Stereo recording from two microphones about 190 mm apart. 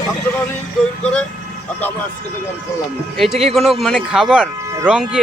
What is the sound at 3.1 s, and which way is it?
Speech, centre (ahead or behind).